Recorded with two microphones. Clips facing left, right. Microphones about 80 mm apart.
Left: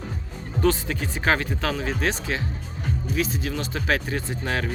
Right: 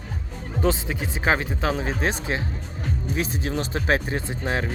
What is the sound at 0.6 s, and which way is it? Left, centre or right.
Speech, centre.